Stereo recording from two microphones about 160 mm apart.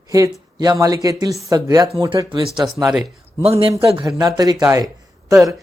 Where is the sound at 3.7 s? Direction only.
20° right (ahead or behind).